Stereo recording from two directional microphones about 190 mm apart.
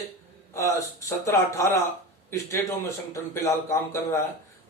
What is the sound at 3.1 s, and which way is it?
A man's voice, 15° left (ahead or behind).